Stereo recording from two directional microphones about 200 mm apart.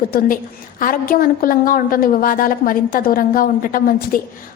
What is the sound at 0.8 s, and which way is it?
A woman's voice, 45° left (ahead or behind).